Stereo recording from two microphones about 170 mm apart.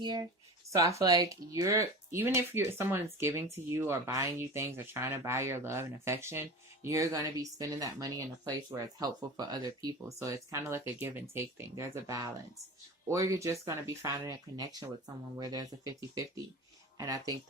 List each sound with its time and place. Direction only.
0.0 s speech: 25° right (ahead or behind)